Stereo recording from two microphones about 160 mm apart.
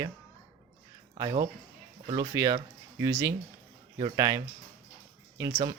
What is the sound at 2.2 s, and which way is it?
Speech, 20° right (ahead or behind).